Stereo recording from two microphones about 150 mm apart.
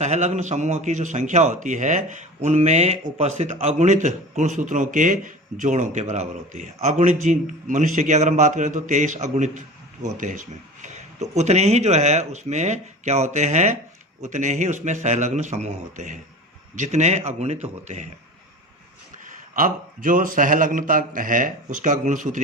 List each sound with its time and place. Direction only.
0.0 s a man's voice: 50° right (ahead or behind)
19.2 s a man's voice: 65° right (ahead or behind)